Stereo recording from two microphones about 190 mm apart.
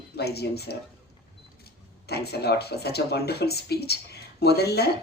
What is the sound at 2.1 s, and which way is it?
Speech, 60° left (ahead or behind).